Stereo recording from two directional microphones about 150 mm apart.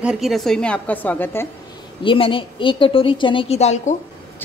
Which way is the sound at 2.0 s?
35° left (ahead or behind).